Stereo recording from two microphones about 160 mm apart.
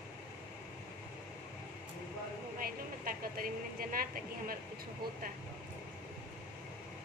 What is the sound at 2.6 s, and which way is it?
A woman's voice, 65° right (ahead or behind).